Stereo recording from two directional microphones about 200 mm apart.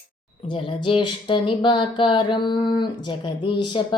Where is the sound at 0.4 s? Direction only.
25° left (ahead or behind).